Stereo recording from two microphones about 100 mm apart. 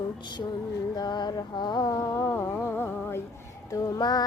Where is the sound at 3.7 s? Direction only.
40° left (ahead or behind).